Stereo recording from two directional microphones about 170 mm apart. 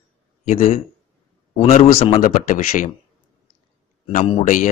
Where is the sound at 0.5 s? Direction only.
35° left (ahead or behind).